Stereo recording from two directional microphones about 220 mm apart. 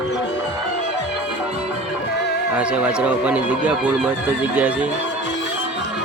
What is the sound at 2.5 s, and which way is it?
Speech, 5° right (ahead or behind).